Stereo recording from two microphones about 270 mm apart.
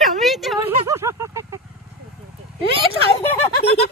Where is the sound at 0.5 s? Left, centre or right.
Centre.